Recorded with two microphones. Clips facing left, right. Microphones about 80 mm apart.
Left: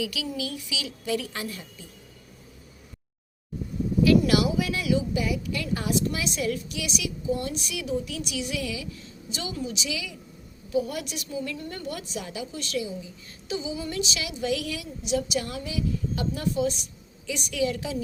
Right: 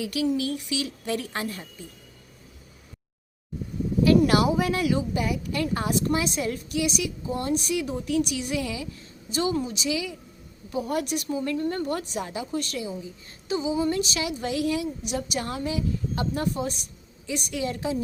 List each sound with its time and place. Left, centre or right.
0.0 s a woman's voice: right
4.0 s a woman's voice: right
15.0 s a woman's voice: right